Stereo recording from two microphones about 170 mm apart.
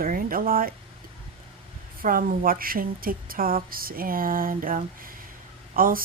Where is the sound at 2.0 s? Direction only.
55° right (ahead or behind).